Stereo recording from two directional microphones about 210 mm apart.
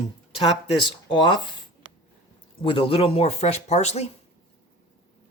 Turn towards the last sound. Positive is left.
turn(degrees=30)  # may be behind; listen again after turning